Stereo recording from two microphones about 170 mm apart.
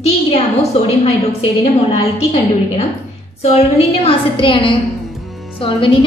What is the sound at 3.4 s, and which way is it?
A woman's voice, 40° left (ahead or behind).